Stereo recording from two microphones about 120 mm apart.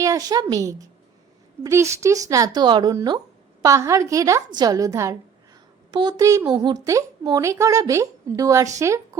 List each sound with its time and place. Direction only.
0.0 s a woman's voice: 30° right (ahead or behind)
5.9 s a woman's voice: 35° right (ahead or behind)